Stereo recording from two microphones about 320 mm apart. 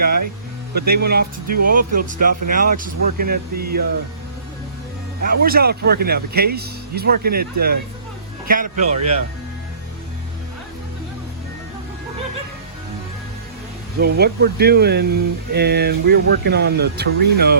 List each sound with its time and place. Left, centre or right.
0.9 s speech: right
5.2 s speech: right
9.0 s speech: right
14.0 s speech: right